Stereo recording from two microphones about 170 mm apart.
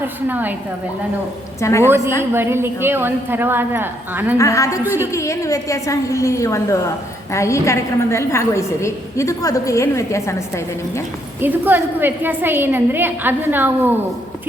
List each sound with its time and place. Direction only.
0.0 s a woman's voice: 10° right (ahead or behind)
1.6 s a woman's voice: 15° left (ahead or behind)
2.3 s a woman's voice: 15° right (ahead or behind)
4.4 s a woman's voice: 20° left (ahead or behind)
11.3 s a woman's voice: 10° right (ahead or behind)